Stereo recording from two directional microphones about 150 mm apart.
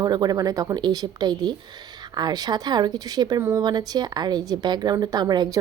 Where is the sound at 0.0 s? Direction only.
25° right (ahead or behind).